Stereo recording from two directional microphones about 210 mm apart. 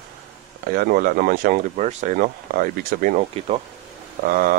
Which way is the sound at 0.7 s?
45° right (ahead or behind).